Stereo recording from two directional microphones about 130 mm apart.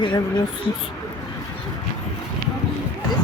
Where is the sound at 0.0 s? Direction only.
35° left (ahead or behind).